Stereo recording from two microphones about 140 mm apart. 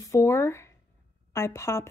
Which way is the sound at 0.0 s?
20° left (ahead or behind).